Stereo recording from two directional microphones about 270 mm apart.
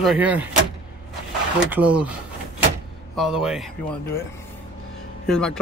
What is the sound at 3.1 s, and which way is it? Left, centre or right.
Speech, centre.